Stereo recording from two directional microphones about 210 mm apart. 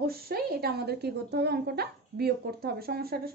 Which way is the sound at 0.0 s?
45° right (ahead or behind).